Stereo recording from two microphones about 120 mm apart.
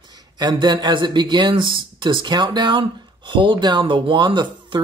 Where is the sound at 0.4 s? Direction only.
35° right (ahead or behind).